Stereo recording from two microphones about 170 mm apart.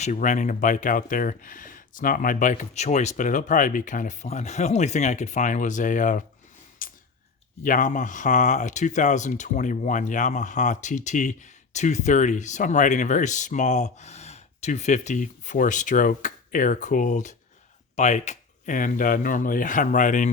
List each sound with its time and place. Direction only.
0.0 s speech: 45° left (ahead or behind)
6.8 s a sound: 55° left (ahead or behind)
7.6 s speech: 50° left (ahead or behind)